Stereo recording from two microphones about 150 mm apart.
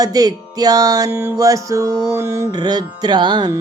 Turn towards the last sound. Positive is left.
turn(degrees=-30)  # may be behind; listen again after turning